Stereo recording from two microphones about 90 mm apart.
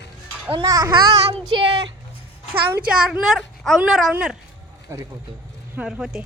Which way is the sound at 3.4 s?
5° left (ahead or behind).